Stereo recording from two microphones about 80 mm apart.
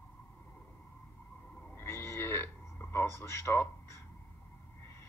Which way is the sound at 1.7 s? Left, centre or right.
Left.